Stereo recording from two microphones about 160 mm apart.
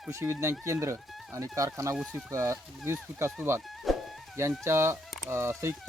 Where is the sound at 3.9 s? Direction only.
Centre (ahead or behind).